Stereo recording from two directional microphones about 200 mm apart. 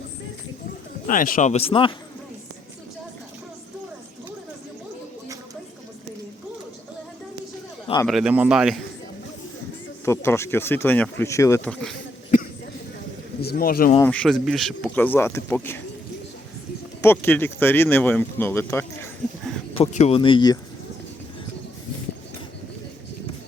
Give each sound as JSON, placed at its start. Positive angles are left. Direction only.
{"t": 1.0, "sound": "speech", "side_deg": 45}
{"t": 8.0, "sound": "a man's voice", "side_deg": -5}
{"t": 10.1, "sound": "speech", "side_deg": 15}
{"t": 13.4, "sound": "speech", "side_deg": 50}
{"t": 14.0, "sound": "speech", "side_deg": 5}
{"t": 17.0, "sound": "speech", "side_deg": 10}
{"t": 19.8, "sound": "speech", "side_deg": 30}